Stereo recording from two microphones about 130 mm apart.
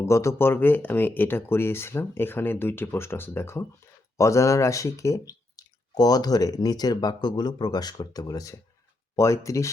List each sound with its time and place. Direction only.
0.0 s speech: 20° left (ahead or behind)